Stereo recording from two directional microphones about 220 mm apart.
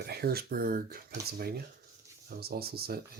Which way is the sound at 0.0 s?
45° right (ahead or behind).